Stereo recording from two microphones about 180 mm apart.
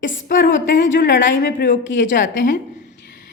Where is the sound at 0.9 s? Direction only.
85° left.